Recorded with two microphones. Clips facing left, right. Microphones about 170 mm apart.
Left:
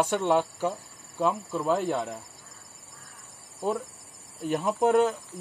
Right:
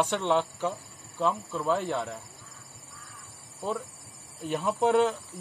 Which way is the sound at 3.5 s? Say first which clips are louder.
Left 3 dB; 15° left (ahead or behind).